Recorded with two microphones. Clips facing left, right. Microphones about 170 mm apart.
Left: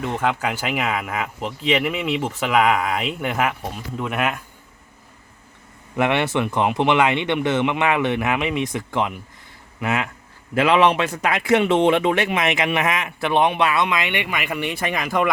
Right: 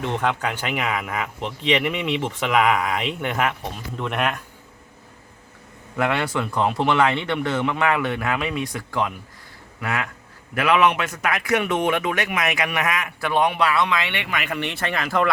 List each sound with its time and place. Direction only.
0.0 s speech: 5° left (ahead or behind)
6.0 s a man's voice: 20° left (ahead or behind)